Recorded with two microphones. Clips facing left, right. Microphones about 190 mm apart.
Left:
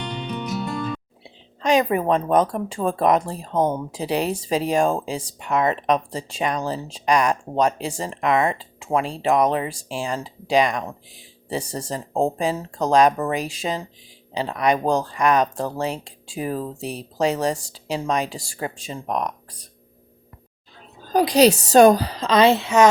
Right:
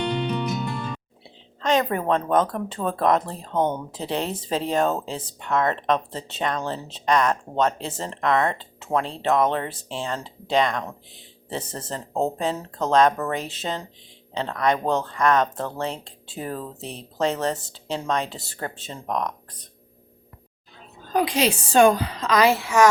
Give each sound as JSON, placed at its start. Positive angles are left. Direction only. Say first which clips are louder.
{"t": 1.6, "sound": "speech", "louder": "left 3 dB", "side_deg": 10}
{"t": 21.0, "sound": "a woman's voice", "louder": "left 6 dB", "side_deg": 35}